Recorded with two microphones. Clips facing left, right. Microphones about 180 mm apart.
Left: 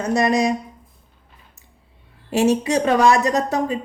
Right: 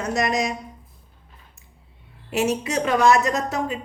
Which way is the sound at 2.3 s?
35° left (ahead or behind).